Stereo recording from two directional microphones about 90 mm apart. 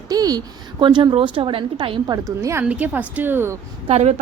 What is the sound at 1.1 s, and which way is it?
Speech, 70° right (ahead or behind).